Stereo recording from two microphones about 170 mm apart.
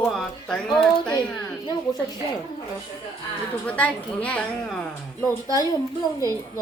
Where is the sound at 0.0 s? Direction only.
5° left (ahead or behind).